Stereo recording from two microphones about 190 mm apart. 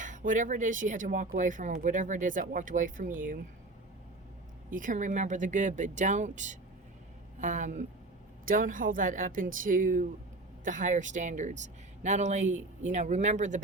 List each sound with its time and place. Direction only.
0.0 s speech: 40° right (ahead or behind)
4.7 s speech: 45° right (ahead or behind)